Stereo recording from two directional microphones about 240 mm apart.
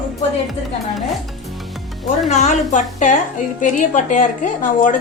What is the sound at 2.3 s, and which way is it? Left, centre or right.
A woman's voice, left.